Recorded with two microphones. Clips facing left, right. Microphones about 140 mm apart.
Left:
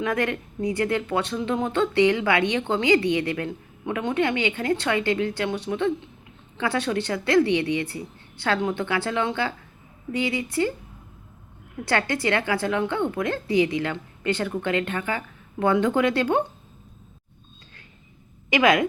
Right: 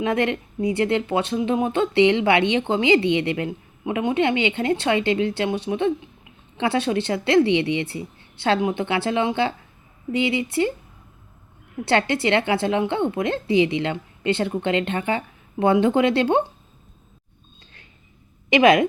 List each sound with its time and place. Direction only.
0.0 s a woman's voice: 25° right (ahead or behind)
11.9 s a woman's voice: 25° right (ahead or behind)
18.5 s a woman's voice: 25° right (ahead or behind)